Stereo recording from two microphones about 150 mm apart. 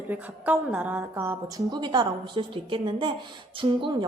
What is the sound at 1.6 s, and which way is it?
A woman's voice, 30° right (ahead or behind).